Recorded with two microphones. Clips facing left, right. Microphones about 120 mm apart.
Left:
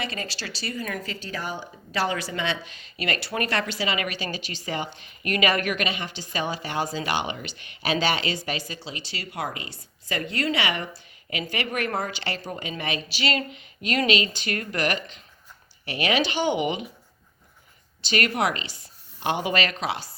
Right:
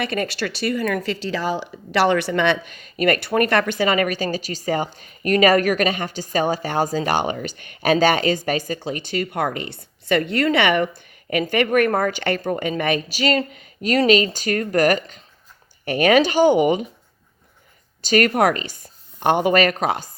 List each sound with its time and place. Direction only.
0.0 s a woman's voice: 60° right (ahead or behind); by 16.8 s 45° right (ahead or behind)
18.0 s speech: 45° right (ahead or behind)